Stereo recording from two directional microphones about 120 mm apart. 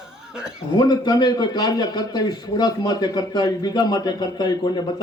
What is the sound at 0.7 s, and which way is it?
A man's voice, 35° left (ahead or behind).